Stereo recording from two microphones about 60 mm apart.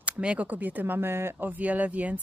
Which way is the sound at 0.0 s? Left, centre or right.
Right.